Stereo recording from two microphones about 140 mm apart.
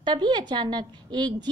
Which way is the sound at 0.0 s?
30° right (ahead or behind).